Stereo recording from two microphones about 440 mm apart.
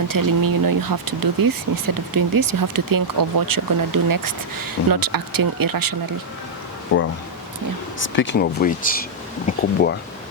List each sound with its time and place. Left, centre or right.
0.1 s speech: right
6.9 s speech: left